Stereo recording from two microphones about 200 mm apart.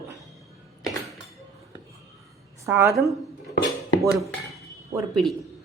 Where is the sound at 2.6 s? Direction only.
10° right (ahead or behind).